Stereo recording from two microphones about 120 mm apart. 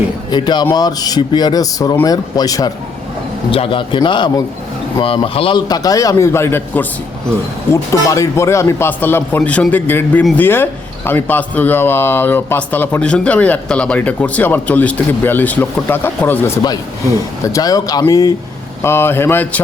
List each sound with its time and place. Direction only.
0.3 s speech: 35° left (ahead or behind)
3.5 s a man's voice: 45° left (ahead or behind)
5.5 s a man's voice: 35° left (ahead or behind); by 16.5 s 15° left (ahead or behind)
17.4 s speech: 30° left (ahead or behind)
18.8 s a man's voice: 20° left (ahead or behind)